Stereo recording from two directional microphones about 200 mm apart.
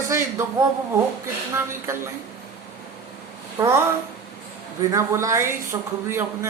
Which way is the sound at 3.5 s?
10° right (ahead or behind).